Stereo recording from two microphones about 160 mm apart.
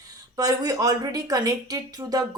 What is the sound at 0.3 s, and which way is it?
A woman's voice, 20° right (ahead or behind).